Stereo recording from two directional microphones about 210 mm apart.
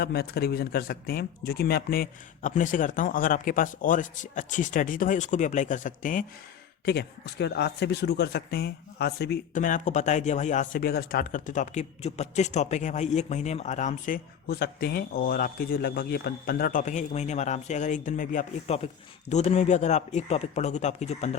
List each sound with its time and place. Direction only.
0.0 s a man's voice: 50° left (ahead or behind)
6.8 s a man's voice: 50° left (ahead or behind); by 21.2 s 30° left (ahead or behind)